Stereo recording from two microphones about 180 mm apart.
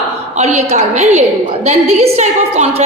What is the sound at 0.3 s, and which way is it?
A woman's voice, 35° right (ahead or behind).